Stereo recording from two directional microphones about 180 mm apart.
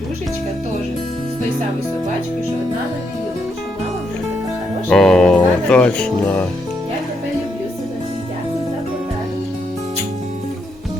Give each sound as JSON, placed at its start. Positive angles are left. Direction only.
{"t": 4.9, "sound": "speech", "side_deg": 5}